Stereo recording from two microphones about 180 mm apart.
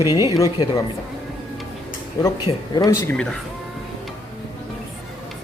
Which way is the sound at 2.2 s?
20° left (ahead or behind).